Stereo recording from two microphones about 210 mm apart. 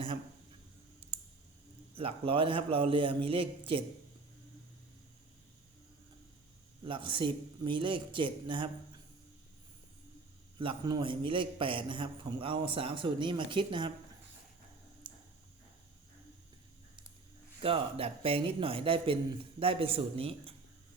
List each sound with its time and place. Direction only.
2.0 s a man's voice: 25° right (ahead or behind)
6.8 s a man's voice: 25° right (ahead or behind)
10.6 s a man's voice: 20° right (ahead or behind)
15.1 s a sound: 20° right (ahead or behind)
17.6 s a man's voice: 25° right (ahead or behind)